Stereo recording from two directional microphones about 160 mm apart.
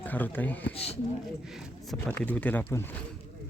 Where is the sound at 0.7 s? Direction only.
40° left (ahead or behind).